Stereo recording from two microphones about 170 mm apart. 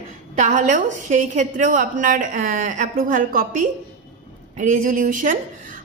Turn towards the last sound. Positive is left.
turn(degrees=-50)  # may be behind; listen again after turning